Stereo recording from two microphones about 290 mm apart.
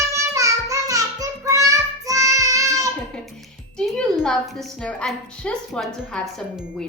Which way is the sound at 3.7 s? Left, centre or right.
Centre.